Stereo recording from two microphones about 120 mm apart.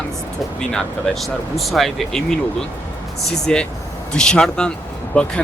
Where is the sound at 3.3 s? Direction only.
5° left (ahead or behind).